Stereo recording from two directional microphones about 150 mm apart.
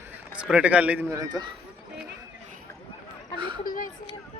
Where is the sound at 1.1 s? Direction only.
25° right (ahead or behind).